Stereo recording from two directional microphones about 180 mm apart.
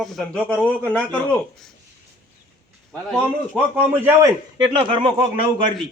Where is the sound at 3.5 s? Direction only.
10° right (ahead or behind).